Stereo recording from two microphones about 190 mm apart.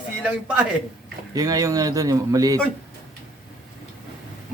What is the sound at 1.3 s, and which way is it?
Speech, 20° right (ahead or behind).